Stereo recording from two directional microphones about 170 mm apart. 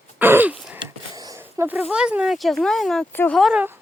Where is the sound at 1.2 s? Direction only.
20° right (ahead or behind).